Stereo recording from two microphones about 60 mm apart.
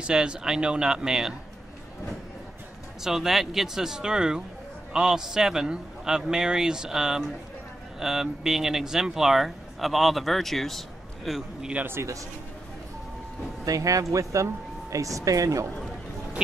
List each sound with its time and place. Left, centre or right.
0.0 s a man's voice: centre
3.0 s a man's voice: centre
11.8 s speech: right
13.7 s speech: right